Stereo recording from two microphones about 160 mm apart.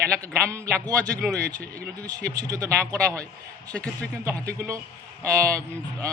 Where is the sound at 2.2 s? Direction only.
20° right (ahead or behind).